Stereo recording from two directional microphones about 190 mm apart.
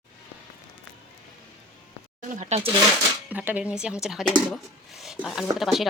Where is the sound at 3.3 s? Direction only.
10° right (ahead or behind).